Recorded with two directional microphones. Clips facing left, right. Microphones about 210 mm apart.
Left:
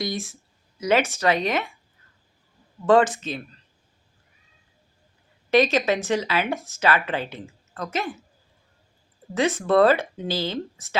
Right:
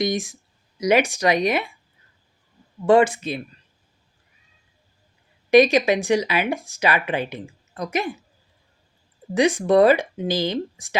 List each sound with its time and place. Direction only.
0.0 s speech: 15° right (ahead or behind)
2.8 s speech: 10° right (ahead or behind)
5.5 s speech: 15° right (ahead or behind)
9.3 s speech: 15° right (ahead or behind)